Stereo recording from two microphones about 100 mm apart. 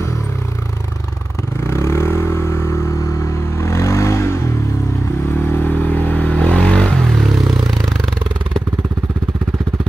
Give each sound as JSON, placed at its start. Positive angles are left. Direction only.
{"t": 1.7, "sound": "vehicle", "side_deg": 25}
{"t": 3.6, "sound": "vehicle", "side_deg": 30}
{"t": 5.7, "sound": "vehicle", "side_deg": 15}